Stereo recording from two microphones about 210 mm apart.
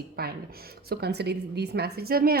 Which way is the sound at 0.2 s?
45° right (ahead or behind).